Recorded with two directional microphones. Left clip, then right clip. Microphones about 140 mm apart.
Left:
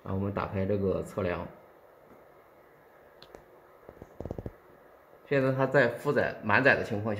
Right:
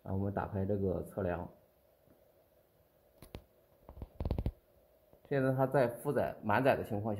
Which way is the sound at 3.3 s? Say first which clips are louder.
Left 1 dB; 45° right (ahead or behind).